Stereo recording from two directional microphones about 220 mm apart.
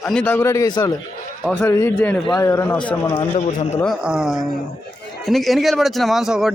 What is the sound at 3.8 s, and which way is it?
Speech, centre (ahead or behind).